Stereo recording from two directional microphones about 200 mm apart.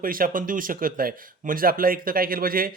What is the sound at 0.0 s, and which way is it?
Speech, 45° right (ahead or behind).